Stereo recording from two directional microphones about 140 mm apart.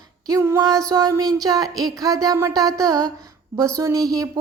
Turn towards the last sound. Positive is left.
turn(degrees=-25)  # may be behind; listen again after turning